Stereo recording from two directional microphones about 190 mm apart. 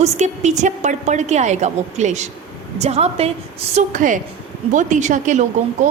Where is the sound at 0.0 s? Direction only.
40° right (ahead or behind).